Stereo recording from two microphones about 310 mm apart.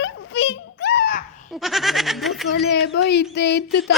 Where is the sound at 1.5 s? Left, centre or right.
Centre.